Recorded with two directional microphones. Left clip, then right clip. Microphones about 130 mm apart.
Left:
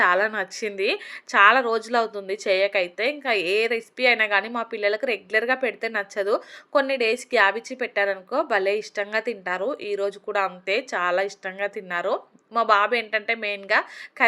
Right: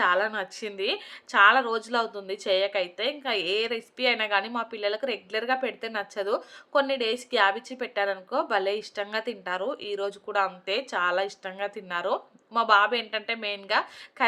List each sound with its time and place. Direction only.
0.0 s speech: 30° left (ahead or behind)